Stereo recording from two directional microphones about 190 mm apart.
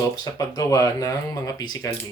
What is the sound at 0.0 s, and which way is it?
Speech, 15° left (ahead or behind).